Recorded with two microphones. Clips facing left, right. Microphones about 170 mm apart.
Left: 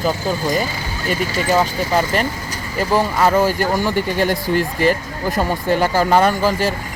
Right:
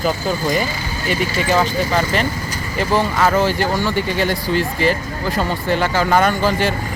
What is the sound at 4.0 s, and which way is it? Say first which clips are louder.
Speech: left 1 dB; 45° left (ahead or behind).